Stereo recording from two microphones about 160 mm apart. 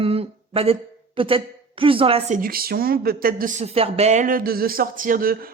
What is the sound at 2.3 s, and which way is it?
Speech, 65° right (ahead or behind).